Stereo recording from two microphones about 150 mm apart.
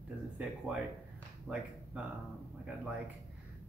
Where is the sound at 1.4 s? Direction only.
5° right (ahead or behind).